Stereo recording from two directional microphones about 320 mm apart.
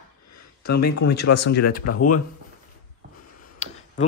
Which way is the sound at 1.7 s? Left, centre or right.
Left.